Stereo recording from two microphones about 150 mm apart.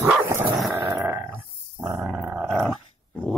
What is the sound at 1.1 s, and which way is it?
Dog, 20° right (ahead or behind).